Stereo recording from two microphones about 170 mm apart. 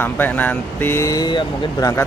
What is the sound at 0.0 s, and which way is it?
Speech, 10° left (ahead or behind).